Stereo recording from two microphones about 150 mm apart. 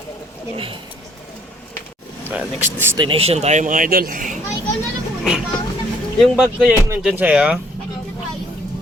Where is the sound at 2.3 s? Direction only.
10° right (ahead or behind).